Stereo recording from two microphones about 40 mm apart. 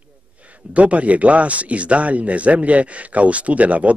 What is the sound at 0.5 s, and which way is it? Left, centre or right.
Speech, right.